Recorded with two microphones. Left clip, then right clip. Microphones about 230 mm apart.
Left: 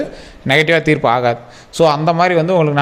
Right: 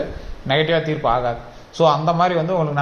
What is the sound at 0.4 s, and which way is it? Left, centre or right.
A man's voice, left.